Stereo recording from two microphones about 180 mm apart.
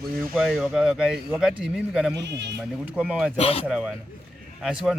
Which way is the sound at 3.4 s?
35° left (ahead or behind).